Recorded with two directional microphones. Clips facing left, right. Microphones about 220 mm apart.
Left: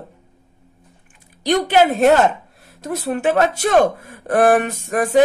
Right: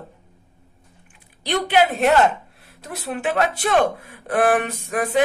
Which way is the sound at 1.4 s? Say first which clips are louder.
Left 4 dB; 45° left (ahead or behind).